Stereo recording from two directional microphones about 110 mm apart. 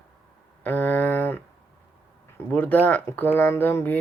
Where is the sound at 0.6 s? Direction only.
15° left (ahead or behind).